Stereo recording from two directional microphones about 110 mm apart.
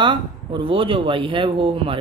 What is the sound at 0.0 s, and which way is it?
Speech, 45° right (ahead or behind).